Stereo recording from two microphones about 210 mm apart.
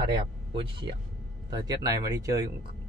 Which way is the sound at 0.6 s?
25° right (ahead or behind).